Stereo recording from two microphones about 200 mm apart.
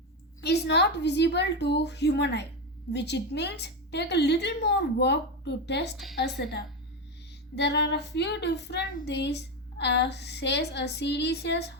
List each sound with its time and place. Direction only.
0.4 s speech: 55° left (ahead or behind)